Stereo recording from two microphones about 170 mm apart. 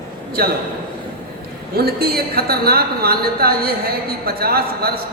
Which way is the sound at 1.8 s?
65° right (ahead or behind).